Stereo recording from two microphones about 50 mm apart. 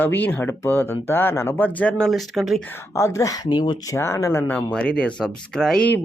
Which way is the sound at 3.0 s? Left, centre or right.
Left.